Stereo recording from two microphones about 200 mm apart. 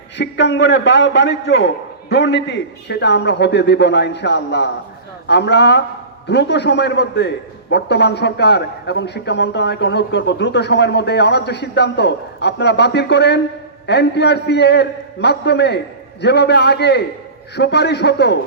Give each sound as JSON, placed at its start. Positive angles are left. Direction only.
{"t": 0.2, "sound": "a man's voice", "side_deg": 60}